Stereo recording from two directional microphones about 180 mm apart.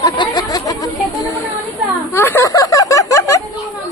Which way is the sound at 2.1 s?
15° left (ahead or behind).